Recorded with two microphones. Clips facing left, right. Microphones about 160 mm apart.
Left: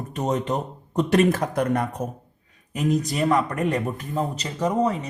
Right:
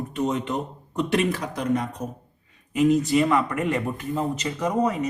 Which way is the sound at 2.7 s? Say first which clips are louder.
Right 5 dB; 40° left (ahead or behind).